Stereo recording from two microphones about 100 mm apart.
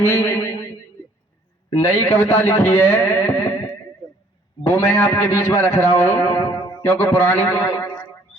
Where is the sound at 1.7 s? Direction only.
20° left (ahead or behind).